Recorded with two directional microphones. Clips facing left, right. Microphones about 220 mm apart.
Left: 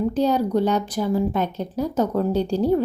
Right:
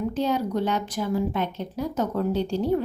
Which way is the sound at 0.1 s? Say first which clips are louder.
Left 5 dB; 35° left (ahead or behind).